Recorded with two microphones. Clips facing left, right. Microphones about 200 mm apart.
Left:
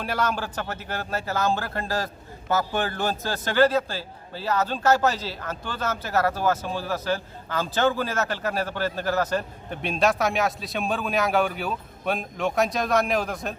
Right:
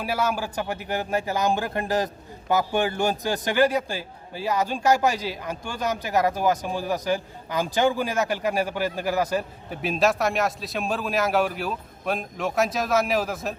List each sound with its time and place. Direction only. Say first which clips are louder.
0.0 s a man's voice: right 1 dB; 10° right (ahead or behind)